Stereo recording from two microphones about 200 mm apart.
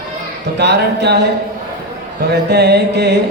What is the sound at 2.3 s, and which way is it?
Speech, 55° right (ahead or behind).